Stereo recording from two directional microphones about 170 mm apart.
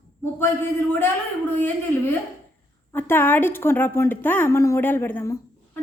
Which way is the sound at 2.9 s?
10° left (ahead or behind).